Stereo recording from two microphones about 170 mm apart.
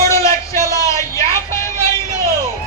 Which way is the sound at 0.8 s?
20° left (ahead or behind).